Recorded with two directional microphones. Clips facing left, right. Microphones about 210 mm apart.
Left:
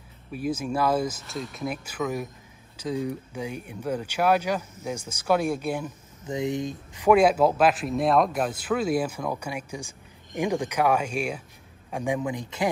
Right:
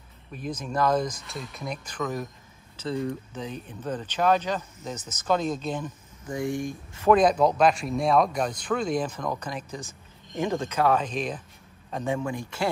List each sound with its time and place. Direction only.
0.3 s speech: 5° left (ahead or behind)
6.2 s speech: 20° left (ahead or behind)